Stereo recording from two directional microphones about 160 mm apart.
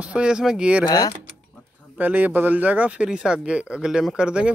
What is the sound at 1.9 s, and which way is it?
Speech, 10° right (ahead or behind).